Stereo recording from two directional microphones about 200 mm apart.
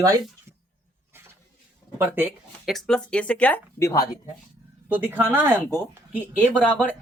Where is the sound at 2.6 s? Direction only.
Centre (ahead or behind).